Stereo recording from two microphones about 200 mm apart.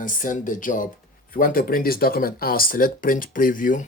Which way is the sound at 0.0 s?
40° left (ahead or behind).